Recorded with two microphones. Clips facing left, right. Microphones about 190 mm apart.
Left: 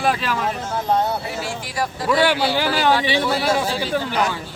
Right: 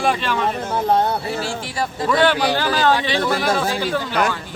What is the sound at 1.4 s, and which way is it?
Speech, 30° right (ahead or behind).